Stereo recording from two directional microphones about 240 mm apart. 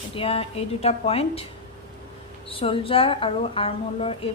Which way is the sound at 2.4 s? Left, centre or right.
Left.